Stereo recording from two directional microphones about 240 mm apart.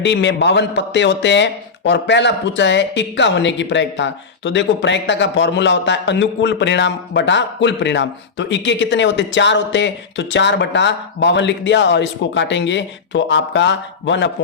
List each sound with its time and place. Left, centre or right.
0.0 s a man's voice: left